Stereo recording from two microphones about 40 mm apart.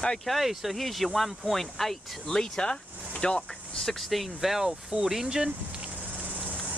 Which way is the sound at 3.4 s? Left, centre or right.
Centre.